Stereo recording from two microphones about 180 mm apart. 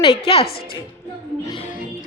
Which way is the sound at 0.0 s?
30° left (ahead or behind).